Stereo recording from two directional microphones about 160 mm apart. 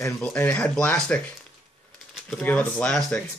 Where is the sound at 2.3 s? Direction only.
5° left (ahead or behind).